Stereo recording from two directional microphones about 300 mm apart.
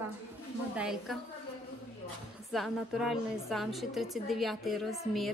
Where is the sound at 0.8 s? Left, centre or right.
Centre.